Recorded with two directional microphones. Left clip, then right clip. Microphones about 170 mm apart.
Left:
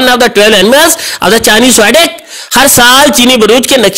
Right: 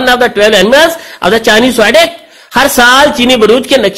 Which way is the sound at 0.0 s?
35° left (ahead or behind).